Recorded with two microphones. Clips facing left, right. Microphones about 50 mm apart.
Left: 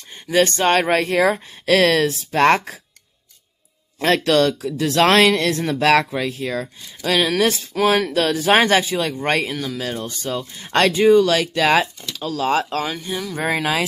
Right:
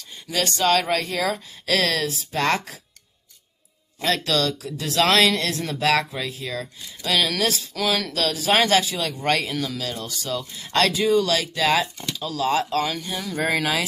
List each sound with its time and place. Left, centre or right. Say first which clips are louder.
0.0 s speech: left 9 dB; left
4.0 s speech: left 6 dB; left
7.2 s speech: left 4 dB; left
13.4 s speech: left 2 dB; left